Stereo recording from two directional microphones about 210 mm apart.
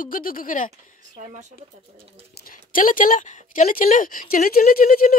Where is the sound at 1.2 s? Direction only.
35° right (ahead or behind).